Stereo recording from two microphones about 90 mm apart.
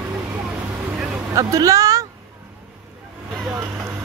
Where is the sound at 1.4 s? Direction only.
40° right (ahead or behind).